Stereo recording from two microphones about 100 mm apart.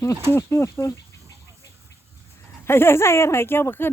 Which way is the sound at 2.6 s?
25° left (ahead or behind).